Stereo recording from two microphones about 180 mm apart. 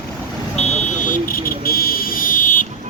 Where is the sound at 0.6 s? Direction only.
40° left (ahead or behind).